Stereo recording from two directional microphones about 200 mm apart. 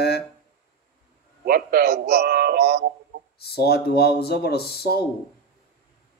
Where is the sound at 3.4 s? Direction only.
50° left (ahead or behind).